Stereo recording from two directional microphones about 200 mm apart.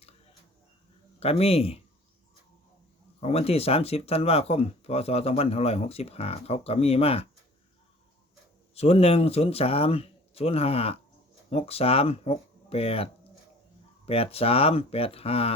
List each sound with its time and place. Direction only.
1.2 s speech: 30° left (ahead or behind)
3.2 s speech: 30° left (ahead or behind)
8.7 s speech: 30° left (ahead or behind)